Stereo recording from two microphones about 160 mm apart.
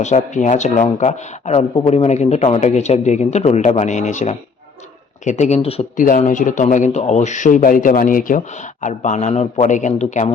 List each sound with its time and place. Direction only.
0.0 s speech: 50° left (ahead or behind)
5.4 s speech: 40° left (ahead or behind)
6.1 s speech: 50° left (ahead or behind)